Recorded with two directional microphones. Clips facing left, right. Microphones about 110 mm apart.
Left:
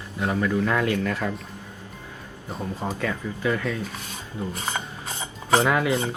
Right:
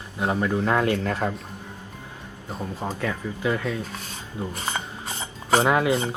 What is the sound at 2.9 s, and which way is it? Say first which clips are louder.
Speech: even; 15° right (ahead or behind).